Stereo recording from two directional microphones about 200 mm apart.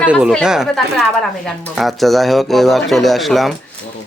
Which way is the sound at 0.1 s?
Centre (ahead or behind).